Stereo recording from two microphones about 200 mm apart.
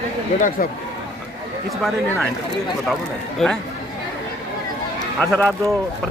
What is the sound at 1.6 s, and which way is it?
Speech, 5° left (ahead or behind).